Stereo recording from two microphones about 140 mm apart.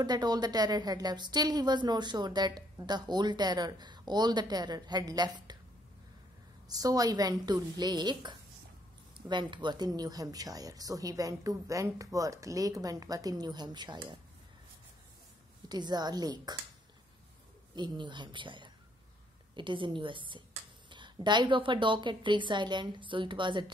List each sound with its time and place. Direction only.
0.0 s a woman's voice: 30° right (ahead or behind)
6.7 s a woman's voice: 25° right (ahead or behind)
15.7 s a woman's voice: 30° right (ahead or behind)
17.7 s a woman's voice: 35° right (ahead or behind)